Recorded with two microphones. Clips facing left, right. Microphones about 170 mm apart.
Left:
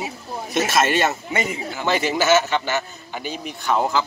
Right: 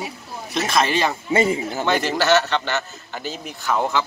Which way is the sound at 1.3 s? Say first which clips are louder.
Right 6 dB; 30° right (ahead or behind).